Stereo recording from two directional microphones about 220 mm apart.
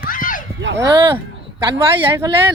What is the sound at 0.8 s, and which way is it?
Speech, 20° right (ahead or behind).